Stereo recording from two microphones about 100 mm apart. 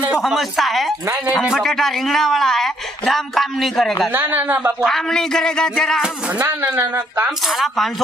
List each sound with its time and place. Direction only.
0.2 s speech: centre (ahead or behind)
4.1 s speech: 20° right (ahead or behind)
4.8 s speech: 5° left (ahead or behind)
6.6 s speech: 15° right (ahead or behind)
7.2 s speech: centre (ahead or behind)